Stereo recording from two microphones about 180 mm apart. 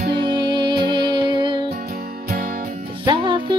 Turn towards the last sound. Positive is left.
turn(degrees=-25)  # may be behind; listen again after turning